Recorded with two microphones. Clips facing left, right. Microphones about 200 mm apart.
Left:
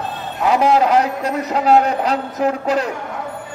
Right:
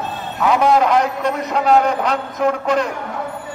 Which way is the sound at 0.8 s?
35° left (ahead or behind).